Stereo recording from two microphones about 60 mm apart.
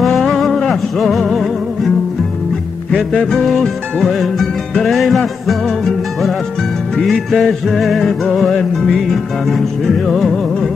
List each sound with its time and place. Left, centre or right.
0.0 s music: centre
3.3 s music: centre